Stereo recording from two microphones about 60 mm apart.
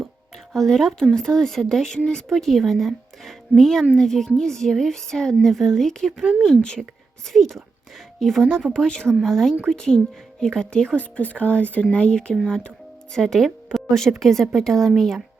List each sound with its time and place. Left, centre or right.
0.5 s a woman's voice: centre